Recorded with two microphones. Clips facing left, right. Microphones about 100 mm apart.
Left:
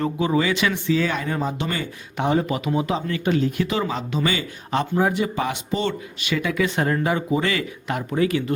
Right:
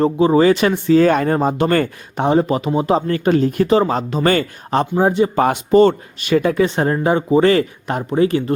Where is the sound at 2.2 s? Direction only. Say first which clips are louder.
Right 6 dB; 35° right (ahead or behind).